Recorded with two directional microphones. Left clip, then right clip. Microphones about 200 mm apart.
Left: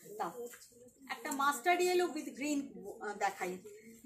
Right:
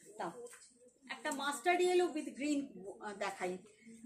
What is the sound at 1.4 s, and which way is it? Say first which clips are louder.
Speech: left 2 dB; 15° right (ahead or behind).